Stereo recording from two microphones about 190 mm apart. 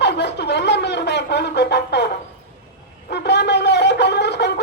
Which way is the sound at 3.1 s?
65° left (ahead or behind).